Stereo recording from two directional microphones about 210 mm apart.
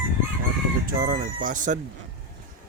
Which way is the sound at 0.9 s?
45° right (ahead or behind).